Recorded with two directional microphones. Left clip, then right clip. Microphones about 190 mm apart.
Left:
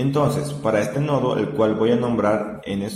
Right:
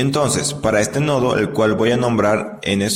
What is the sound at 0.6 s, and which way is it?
A man's voice, 40° right (ahead or behind).